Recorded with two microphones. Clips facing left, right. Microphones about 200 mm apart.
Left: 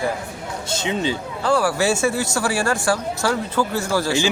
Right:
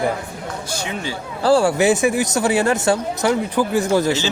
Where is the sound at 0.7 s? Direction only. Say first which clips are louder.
Left 6 dB; 20° left (ahead or behind).